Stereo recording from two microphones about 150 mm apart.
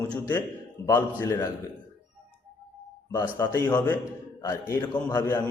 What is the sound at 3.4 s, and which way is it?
A man's voice, 20° left (ahead or behind).